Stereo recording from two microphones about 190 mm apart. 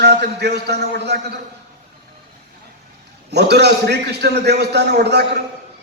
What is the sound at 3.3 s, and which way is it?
A man's voice, 60° right (ahead or behind).